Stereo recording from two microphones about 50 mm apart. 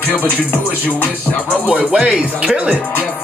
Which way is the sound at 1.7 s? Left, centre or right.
Centre.